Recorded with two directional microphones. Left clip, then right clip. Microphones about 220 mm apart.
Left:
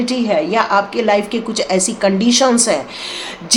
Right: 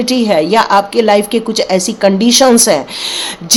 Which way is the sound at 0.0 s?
30° right (ahead or behind).